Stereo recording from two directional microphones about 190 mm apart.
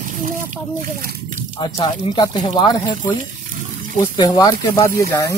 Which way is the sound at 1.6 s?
25° left (ahead or behind).